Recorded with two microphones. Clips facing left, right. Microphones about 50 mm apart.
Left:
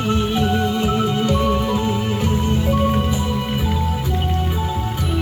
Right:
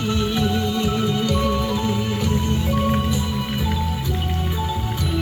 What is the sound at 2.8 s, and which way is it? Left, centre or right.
Music, centre.